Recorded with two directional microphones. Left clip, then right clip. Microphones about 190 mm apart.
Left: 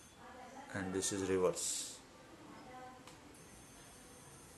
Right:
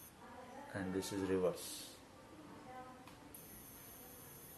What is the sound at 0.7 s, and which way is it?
Speech, 25° left (ahead or behind).